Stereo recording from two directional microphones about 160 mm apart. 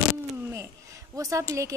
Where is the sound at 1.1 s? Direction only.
20° right (ahead or behind).